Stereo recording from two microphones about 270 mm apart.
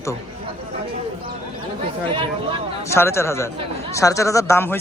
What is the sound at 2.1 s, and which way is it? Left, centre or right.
Speech, centre.